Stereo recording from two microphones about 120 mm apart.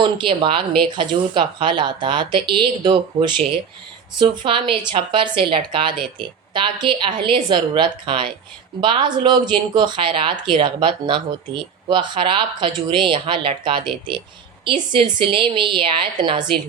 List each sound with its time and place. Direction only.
0.0 s a woman's voice: 45° right (ahead or behind)